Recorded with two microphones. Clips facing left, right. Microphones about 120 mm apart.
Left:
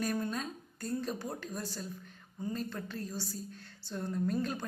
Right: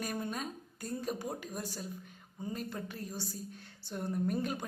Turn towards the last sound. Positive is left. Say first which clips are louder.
# left 1 dB
turn(degrees=-15)  # may be behind; listen again after turning